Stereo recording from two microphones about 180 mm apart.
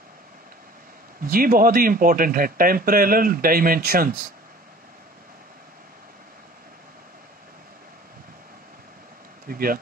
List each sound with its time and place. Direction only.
1.2 s speech: 55° right (ahead or behind)
9.5 s speech: 55° right (ahead or behind)